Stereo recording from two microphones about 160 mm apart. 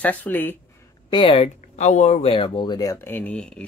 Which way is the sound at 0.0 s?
10° left (ahead or behind).